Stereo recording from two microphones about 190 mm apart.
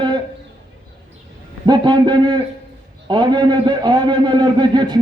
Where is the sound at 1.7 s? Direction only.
20° right (ahead or behind).